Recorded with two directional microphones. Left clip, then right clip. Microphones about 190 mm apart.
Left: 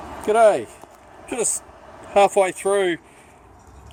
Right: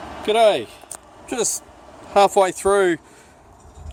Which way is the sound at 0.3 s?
10° right (ahead or behind).